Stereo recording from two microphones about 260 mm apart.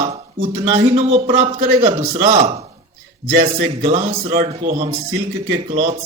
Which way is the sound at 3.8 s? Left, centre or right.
Right.